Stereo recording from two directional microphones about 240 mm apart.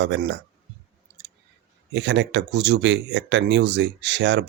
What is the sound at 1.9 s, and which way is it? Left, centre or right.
Speech, right.